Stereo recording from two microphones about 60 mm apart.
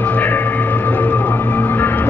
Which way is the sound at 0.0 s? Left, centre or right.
Left.